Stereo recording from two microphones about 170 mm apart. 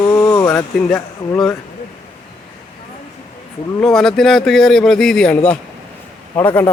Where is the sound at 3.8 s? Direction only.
5° left (ahead or behind).